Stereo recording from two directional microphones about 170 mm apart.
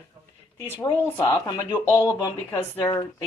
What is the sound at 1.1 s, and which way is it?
Speech, 15° left (ahead or behind).